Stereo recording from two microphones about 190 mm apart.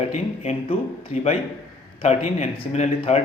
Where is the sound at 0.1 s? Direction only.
35° left (ahead or behind).